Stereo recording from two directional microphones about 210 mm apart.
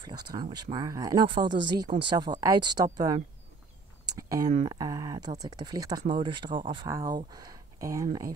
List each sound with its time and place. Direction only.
0.0 s speech: 20° right (ahead or behind)
4.1 s a sound: 15° right (ahead or behind)
4.6 s speech: 15° right (ahead or behind)